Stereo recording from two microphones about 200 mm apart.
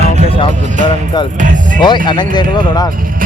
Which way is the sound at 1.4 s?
40° right (ahead or behind).